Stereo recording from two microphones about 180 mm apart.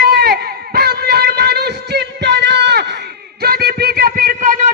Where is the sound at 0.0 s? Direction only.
60° right (ahead or behind).